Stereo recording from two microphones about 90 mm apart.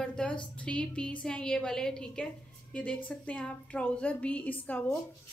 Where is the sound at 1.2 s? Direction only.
10° left (ahead or behind).